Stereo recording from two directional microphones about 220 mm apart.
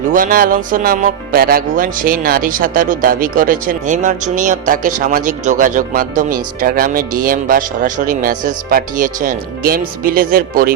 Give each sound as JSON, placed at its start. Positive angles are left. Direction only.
{"t": 0.1, "sound": "speech", "side_deg": -40}